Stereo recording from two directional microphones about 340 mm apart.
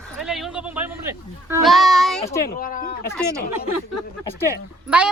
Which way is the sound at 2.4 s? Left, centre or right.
Left.